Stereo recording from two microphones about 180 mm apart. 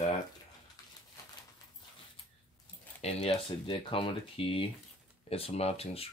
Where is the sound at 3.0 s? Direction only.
35° left (ahead or behind).